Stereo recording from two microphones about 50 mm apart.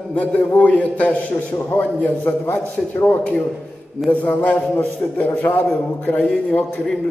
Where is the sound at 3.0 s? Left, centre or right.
Left.